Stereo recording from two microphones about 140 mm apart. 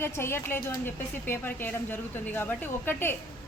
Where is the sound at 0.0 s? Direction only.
15° left (ahead or behind).